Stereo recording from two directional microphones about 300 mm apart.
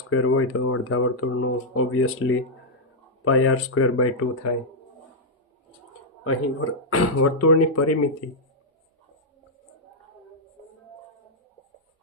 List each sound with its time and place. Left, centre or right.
0.1 s speech: left
6.2 s speech: left